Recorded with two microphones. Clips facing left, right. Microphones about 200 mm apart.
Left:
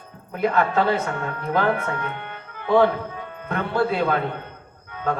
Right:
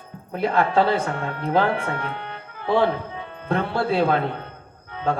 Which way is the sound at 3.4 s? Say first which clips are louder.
Even; 30° right (ahead or behind).